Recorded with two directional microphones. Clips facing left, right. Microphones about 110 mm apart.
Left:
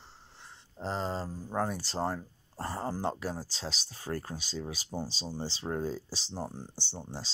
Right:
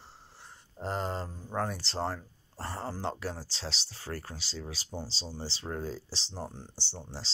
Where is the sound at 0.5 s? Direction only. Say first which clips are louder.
Even; 5° right (ahead or behind).